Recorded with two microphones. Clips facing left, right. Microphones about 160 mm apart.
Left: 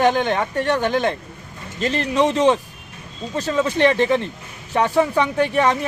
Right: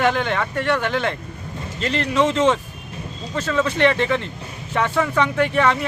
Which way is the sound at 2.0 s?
15° left (ahead or behind).